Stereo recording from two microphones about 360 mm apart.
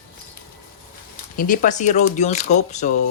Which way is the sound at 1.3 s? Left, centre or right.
Left.